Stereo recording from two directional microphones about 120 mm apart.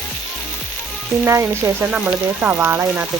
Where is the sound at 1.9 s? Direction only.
15° right (ahead or behind).